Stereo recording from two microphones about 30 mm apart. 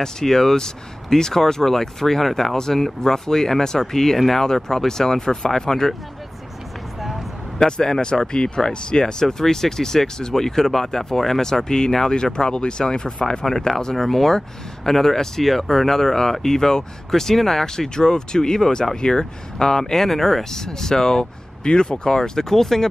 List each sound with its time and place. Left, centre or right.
0.0 s speech: centre
7.0 s vehicle: centre
7.5 s speech: left
11.4 s speech: centre
17.8 s speech: left
19.7 s speech: centre
21.6 s speech: left; by 22.8 s centre